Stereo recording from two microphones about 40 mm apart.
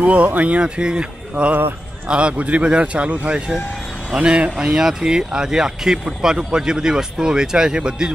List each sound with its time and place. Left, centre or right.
0.0 s speech: right
0.6 s speech: right